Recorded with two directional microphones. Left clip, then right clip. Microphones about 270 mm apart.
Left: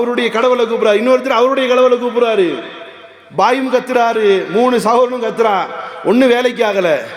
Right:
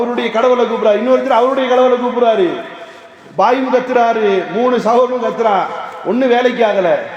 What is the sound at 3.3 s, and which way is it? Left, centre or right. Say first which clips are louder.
A man's voice: right 1 dB; left.